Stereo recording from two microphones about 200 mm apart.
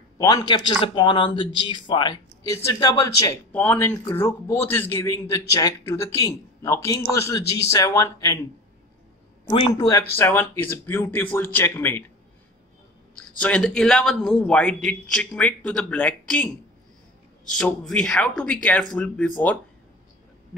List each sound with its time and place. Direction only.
0.2 s speech: 15° left (ahead or behind)
9.5 s speech: 25° left (ahead or behind)
13.4 s a man's voice: 5° left (ahead or behind)
17.6 s a man's voice: 5° left (ahead or behind)